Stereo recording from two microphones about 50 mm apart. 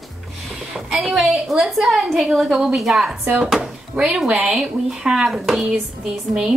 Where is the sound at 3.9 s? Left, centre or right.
Right.